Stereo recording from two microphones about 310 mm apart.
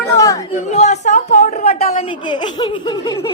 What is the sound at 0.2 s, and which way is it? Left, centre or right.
Chatter, centre.